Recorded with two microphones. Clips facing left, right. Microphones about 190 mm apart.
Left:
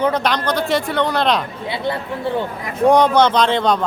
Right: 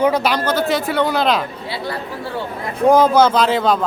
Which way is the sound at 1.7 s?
20° left (ahead or behind).